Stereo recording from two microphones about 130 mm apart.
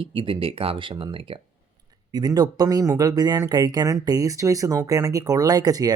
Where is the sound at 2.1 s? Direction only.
30° right (ahead or behind).